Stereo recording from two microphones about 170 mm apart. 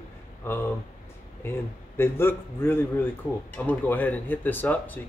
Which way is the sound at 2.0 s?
15° left (ahead or behind).